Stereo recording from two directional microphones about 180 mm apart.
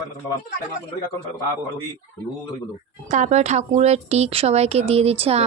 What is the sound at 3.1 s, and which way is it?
A woman's voice, 40° right (ahead or behind).